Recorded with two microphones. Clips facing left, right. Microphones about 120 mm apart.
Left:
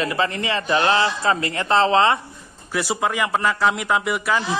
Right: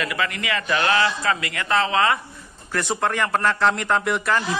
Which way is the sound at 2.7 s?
5° left (ahead or behind).